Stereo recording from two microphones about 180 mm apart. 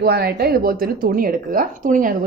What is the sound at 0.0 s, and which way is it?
A woman's voice, 60° right (ahead or behind).